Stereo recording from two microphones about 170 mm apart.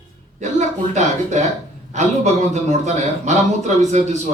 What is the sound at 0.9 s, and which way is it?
A man's voice, 45° right (ahead or behind).